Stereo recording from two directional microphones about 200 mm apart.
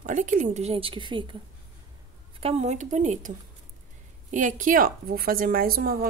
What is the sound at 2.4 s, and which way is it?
A woman's voice, 35° right (ahead or behind).